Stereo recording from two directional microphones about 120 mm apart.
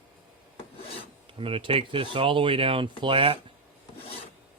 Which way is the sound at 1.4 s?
50° right (ahead or behind).